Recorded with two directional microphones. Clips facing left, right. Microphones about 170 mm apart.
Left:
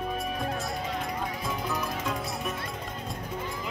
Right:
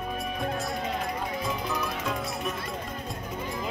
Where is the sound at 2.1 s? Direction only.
Centre (ahead or behind).